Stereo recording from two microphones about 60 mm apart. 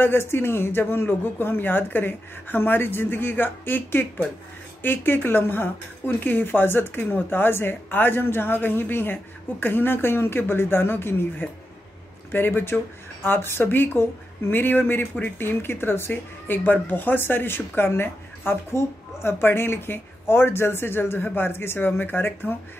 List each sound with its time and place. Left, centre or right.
0.0 s speech: left